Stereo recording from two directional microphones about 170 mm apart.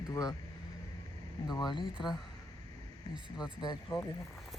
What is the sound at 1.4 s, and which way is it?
Speech, 25° left (ahead or behind).